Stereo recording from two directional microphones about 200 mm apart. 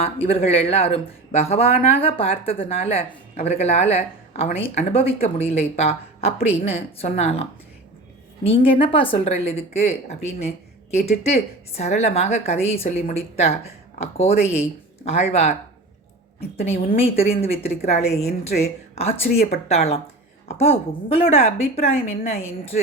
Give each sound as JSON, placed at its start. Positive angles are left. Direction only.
{"t": 0.0, "sound": "speech", "side_deg": 30}
{"t": 8.4, "sound": "speech", "side_deg": 25}